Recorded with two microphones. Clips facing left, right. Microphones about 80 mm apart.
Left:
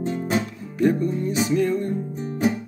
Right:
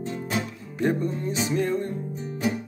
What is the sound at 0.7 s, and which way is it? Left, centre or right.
Music, right.